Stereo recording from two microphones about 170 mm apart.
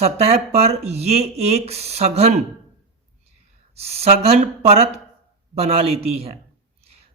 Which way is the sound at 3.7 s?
35° right (ahead or behind).